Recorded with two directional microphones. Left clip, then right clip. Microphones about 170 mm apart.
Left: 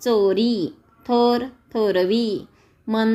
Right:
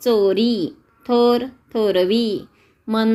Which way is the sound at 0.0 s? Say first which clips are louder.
Right 2 dB; centre (ahead or behind).